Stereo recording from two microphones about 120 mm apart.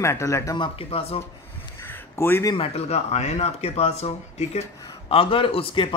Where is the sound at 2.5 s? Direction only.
60° left (ahead or behind).